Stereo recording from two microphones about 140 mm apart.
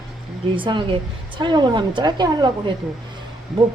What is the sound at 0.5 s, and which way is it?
Speech, 35° right (ahead or behind).